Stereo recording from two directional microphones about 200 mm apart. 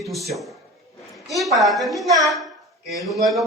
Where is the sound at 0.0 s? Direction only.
Centre (ahead or behind).